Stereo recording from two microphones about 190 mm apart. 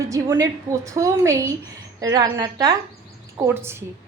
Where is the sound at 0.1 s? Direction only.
15° right (ahead or behind).